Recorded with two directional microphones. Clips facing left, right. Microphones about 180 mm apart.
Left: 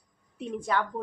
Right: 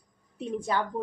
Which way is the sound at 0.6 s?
30° right (ahead or behind).